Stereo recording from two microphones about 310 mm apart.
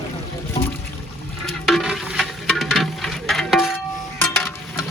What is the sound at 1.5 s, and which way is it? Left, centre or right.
Music, centre.